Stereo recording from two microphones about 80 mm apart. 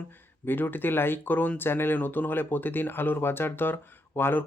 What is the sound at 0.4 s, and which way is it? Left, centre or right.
Speech, left.